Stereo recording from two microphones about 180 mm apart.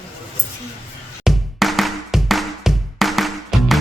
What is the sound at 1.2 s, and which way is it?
Music, centre (ahead or behind).